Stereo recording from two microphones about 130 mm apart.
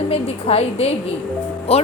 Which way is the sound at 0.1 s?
50° left (ahead or behind).